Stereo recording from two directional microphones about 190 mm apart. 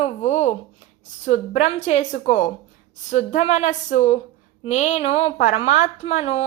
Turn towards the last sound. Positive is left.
turn(degrees=35)  # may be behind; listen again after turning